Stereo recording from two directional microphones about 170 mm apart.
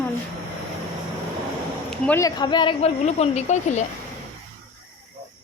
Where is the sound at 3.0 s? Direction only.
40° left (ahead or behind).